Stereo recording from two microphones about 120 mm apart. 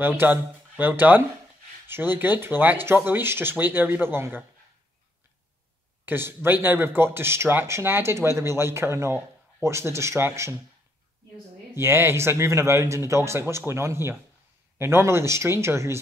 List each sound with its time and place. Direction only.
0.0 s speech: 15° right (ahead or behind)
6.0 s speech: 20° right (ahead or behind)
11.7 s speech: 20° right (ahead or behind)